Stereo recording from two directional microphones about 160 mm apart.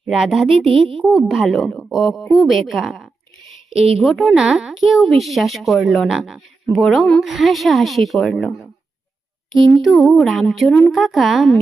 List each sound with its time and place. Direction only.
0.1 s a woman's voice: 5° right (ahead or behind)
3.7 s speech: 40° right (ahead or behind)
3.9 s a woman's voice: centre (ahead or behind)
9.6 s speech: 30° right (ahead or behind)
9.8 s a woman's voice: centre (ahead or behind)